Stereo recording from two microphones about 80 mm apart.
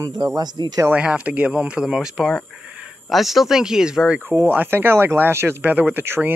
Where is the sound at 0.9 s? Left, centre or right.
Centre.